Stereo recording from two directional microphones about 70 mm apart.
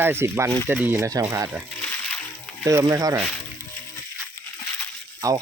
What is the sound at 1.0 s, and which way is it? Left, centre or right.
Speech, right.